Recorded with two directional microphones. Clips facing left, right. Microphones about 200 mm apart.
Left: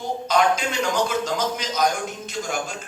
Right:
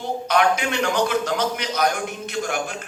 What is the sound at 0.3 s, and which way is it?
A man's voice, 60° right (ahead or behind).